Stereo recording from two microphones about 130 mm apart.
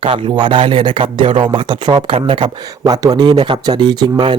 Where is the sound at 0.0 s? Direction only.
40° right (ahead or behind).